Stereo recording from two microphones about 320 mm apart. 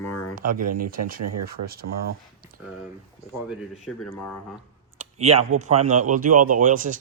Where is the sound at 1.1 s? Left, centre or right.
Right.